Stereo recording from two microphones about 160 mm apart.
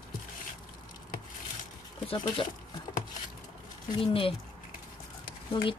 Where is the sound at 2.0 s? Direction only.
30° left (ahead or behind).